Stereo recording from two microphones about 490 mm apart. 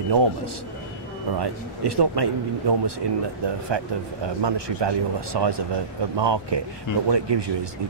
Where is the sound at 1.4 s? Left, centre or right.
Right.